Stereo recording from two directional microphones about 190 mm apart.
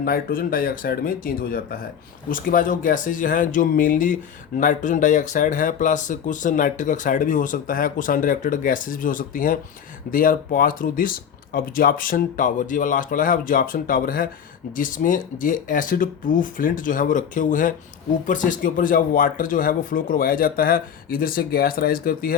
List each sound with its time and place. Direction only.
0.0 s speech: 50° left (ahead or behind)